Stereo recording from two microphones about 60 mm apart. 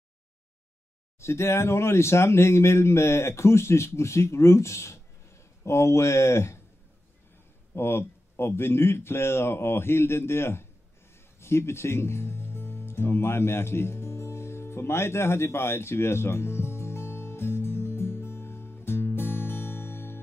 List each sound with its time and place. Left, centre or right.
1.2 s speech: left
7.7 s speech: left
11.3 s music: left